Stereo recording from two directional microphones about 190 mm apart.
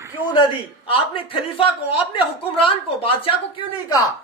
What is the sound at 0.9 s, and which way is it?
A man's voice, 30° left (ahead or behind).